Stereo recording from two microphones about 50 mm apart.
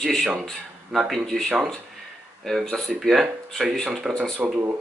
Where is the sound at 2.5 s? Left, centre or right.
Centre.